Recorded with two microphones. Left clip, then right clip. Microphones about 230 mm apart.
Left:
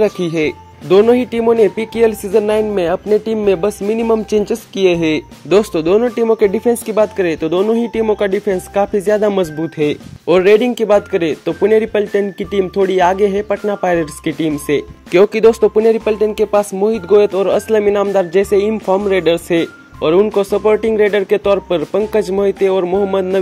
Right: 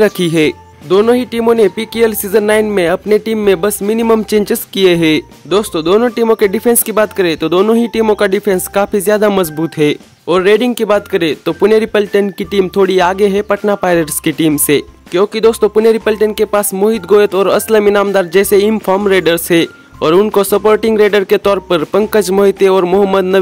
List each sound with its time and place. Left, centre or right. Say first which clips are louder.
0.0 s speech: right 4 dB; right
0.8 s speech: even; centre; by 5.2 s right
5.5 s speech: even; centre; by 9.9 s right
10.2 s speech: even; centre; by 14.9 s right
15.0 s speech: left 2 dB; centre; by 23.3 s right